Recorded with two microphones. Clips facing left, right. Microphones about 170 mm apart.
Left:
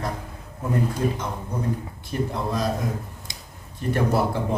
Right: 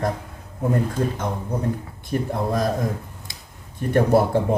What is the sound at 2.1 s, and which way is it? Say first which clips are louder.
Speech: right 3 dB; 50° right (ahead or behind).